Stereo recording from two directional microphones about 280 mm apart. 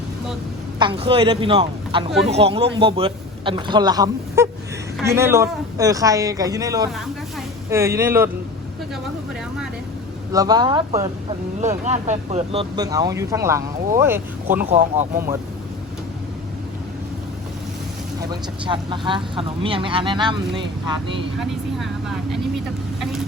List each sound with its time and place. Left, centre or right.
0.8 s speech: centre
10.3 s speech: centre
14.6 s speech: right
18.2 s speech: centre